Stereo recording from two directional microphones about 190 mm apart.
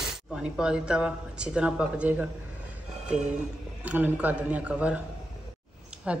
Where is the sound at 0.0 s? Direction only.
5° right (ahead or behind).